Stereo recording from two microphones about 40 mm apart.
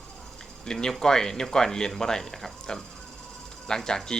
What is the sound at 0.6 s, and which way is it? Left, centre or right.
Speech, centre.